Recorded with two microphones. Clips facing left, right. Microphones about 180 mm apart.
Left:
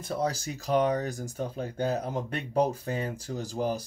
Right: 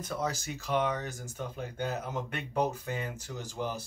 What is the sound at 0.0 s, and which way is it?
Speech, 35° left (ahead or behind).